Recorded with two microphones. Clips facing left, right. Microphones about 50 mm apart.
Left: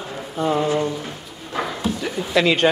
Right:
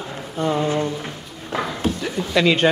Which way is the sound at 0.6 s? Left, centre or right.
Left.